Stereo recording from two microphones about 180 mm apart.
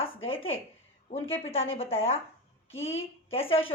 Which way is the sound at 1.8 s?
35° left (ahead or behind).